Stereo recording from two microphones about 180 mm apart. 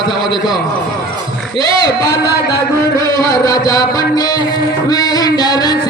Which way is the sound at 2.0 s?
20° left (ahead or behind).